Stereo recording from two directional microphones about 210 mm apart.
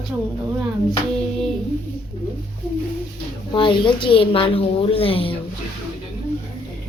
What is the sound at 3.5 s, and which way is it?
A woman's voice, 25° left (ahead or behind).